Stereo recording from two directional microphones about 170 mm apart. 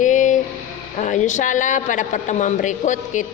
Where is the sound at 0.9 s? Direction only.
45° left (ahead or behind).